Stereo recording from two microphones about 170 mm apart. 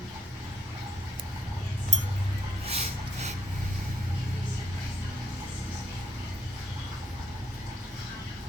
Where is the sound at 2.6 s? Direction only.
40° right (ahead or behind).